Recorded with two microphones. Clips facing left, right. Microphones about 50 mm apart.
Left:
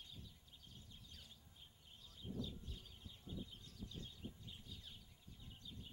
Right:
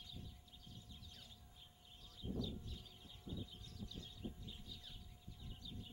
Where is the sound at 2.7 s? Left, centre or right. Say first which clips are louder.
Right 1 dB; left.